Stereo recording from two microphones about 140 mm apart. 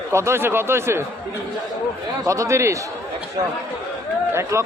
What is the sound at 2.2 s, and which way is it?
Speech, 20° right (ahead or behind).